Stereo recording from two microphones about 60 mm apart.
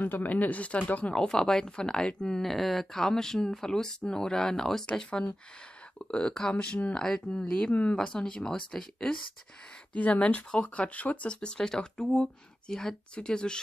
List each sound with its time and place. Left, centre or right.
0.0 s speech: left
1.1 s speech: centre
2.4 s speech: centre
9.9 s speech: left